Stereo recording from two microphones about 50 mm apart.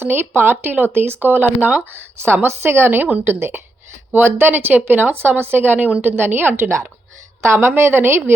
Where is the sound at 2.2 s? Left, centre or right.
Right.